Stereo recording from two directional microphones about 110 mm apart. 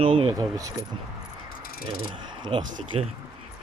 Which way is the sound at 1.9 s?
50° right (ahead or behind).